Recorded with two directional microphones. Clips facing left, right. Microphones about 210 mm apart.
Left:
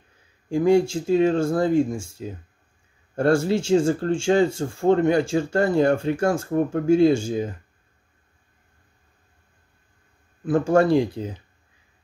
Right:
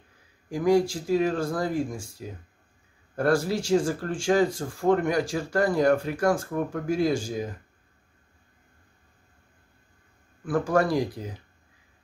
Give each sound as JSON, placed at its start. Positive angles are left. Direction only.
{"t": 0.5, "sound": "speech", "side_deg": 25}
{"t": 10.4, "sound": "speech", "side_deg": 25}